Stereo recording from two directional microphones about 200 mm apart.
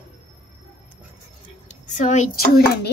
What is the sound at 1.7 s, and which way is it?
A child's voice, 35° left (ahead or behind).